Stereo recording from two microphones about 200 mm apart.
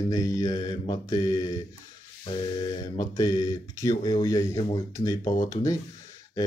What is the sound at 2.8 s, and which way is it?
Speech, 20° left (ahead or behind).